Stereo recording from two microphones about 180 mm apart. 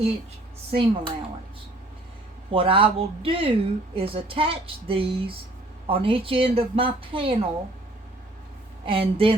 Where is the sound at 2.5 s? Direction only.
30° right (ahead or behind).